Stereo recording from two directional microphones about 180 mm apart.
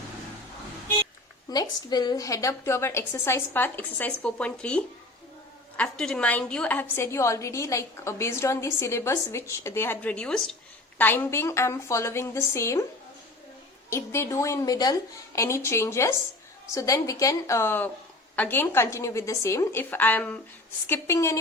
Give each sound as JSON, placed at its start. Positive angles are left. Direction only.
{"t": 1.5, "sound": "a woman's voice", "side_deg": 20}
{"t": 13.9, "sound": "a woman's voice", "side_deg": 15}